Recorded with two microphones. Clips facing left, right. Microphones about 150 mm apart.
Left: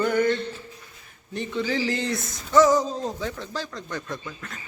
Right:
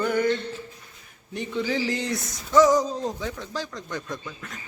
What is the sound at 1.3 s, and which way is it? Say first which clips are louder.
A man's voice: even; 10° right (ahead or behind).